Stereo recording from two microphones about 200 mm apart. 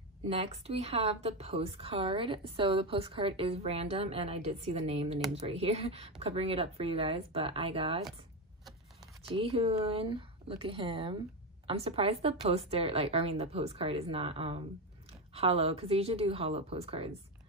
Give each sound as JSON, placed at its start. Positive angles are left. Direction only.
{"t": 0.3, "sound": "a woman's voice", "side_deg": -30}
{"t": 9.3, "sound": "a woman's voice", "side_deg": -25}